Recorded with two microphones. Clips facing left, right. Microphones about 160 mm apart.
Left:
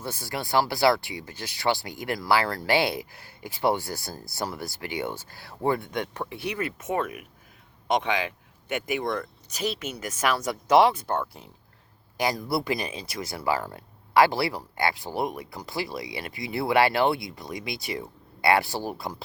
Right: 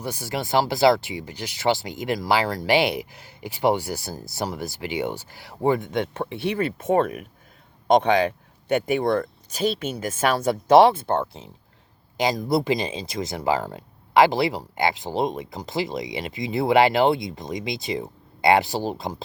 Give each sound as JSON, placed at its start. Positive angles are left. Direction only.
{"t": 0.0, "sound": "speech", "side_deg": -15}